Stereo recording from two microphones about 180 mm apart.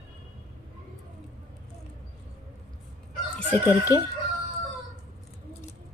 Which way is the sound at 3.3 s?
15° left (ahead or behind).